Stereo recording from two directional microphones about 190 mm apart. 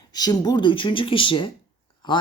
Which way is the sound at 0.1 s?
20° left (ahead or behind).